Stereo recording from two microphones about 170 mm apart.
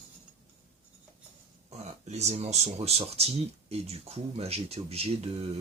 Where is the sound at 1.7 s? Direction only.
40° right (ahead or behind).